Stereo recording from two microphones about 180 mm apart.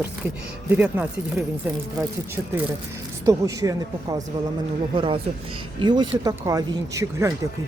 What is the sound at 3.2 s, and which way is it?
Speech, 20° right (ahead or behind).